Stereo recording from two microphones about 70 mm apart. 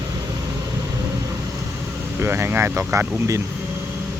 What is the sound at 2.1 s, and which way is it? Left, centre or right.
Speech, right.